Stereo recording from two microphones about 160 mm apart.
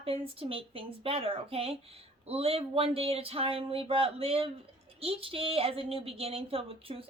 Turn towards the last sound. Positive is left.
turn(degrees=-35)  # may be behind; listen again after turning